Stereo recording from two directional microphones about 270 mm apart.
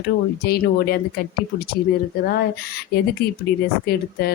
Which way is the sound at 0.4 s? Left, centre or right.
Left.